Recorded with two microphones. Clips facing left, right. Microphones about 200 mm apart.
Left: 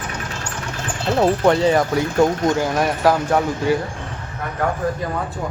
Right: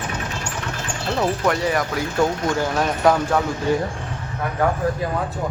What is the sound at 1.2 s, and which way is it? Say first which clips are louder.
Speech: left 6 dB; 25° left (ahead or behind).